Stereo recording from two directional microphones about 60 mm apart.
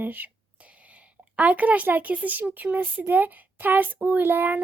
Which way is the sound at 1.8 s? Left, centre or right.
Right.